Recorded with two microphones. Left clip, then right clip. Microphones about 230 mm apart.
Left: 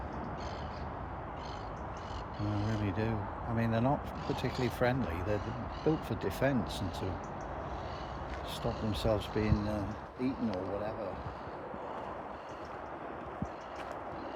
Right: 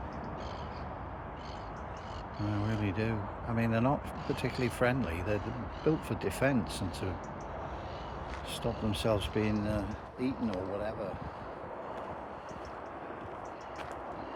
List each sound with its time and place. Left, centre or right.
2.6 s speech: centre
8.6 s speech: centre